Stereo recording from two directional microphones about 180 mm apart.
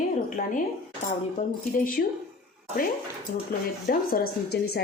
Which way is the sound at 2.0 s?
60° left (ahead or behind).